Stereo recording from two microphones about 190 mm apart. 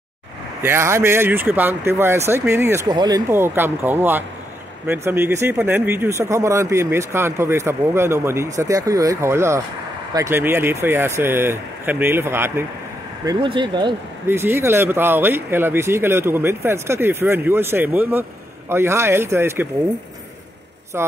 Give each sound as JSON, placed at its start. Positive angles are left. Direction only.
{"t": 0.6, "sound": "speech", "side_deg": -15}
{"t": 14.2, "sound": "speech", "side_deg": -10}